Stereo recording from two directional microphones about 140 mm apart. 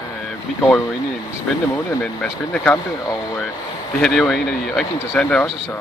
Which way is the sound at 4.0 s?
5° left (ahead or behind).